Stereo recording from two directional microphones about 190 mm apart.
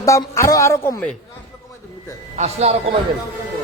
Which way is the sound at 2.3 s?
35° right (ahead or behind).